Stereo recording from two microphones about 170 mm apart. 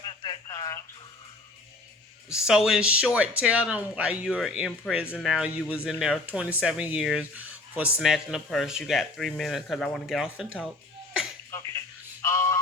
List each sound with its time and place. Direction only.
0.0 s telephone: 25° left (ahead or behind)
2.3 s speech: 5° right (ahead or behind)
12.2 s a sound: 15° left (ahead or behind)